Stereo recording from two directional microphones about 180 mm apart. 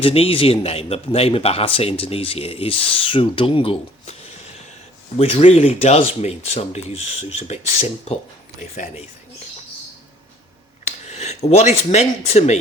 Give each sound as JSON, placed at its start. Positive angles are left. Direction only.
{"t": 0.0, "sound": "a man's voice", "side_deg": 30}
{"t": 5.1, "sound": "a man's voice", "side_deg": 35}
{"t": 10.8, "sound": "speech", "side_deg": 40}